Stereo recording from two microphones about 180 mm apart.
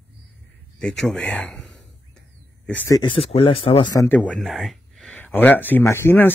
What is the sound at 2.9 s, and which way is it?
Speech, 30° left (ahead or behind).